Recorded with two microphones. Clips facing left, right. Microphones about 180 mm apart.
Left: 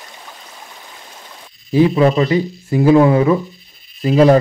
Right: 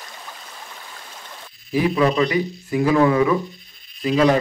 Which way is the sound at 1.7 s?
30° left (ahead or behind).